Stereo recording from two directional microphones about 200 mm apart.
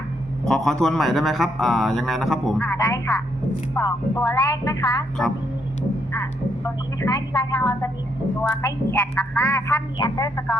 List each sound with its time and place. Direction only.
0.4 s speech: centre (ahead or behind)
2.6 s speech: 15° left (ahead or behind)
7.0 s speech: 20° left (ahead or behind)